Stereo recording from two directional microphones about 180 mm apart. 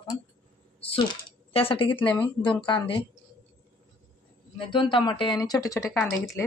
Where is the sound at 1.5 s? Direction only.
30° left (ahead or behind).